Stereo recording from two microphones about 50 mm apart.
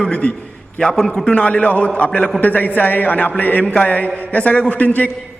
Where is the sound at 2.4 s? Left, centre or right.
Left.